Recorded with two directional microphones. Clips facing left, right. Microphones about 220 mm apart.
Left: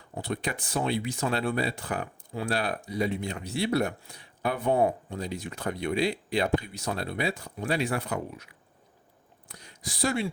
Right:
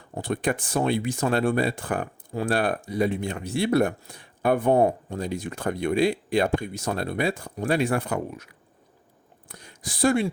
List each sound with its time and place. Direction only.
0.1 s speech: 50° right (ahead or behind)
9.5 s speech: 50° right (ahead or behind)